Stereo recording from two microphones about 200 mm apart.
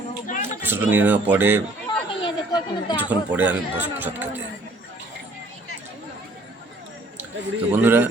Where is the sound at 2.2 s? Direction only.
20° left (ahead or behind).